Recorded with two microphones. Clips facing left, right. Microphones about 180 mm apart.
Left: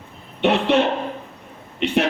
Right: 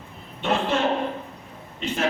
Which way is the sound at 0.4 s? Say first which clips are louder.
Left 6 dB; 70° left (ahead or behind).